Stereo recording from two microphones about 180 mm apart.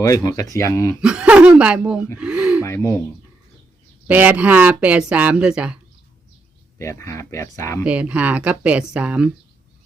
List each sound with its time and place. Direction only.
0.0 s speech: 15° left (ahead or behind)
1.0 s speech: 5° right (ahead or behind)
2.6 s speech: 15° left (ahead or behind)
4.1 s speech: 10° right (ahead or behind)
6.7 s speech: 15° left (ahead or behind)
7.9 s speech: 5° right (ahead or behind)